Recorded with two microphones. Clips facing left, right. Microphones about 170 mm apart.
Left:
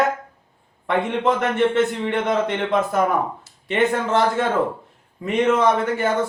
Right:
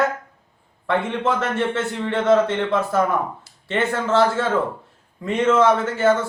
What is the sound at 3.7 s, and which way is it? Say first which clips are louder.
Speech: left 1 dB; 15° left (ahead or behind).